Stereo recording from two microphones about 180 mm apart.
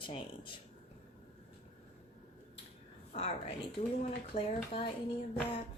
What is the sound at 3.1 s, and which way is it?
Speech, 35° left (ahead or behind).